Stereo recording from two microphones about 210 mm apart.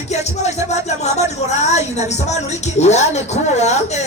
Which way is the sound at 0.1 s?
30° left (ahead or behind).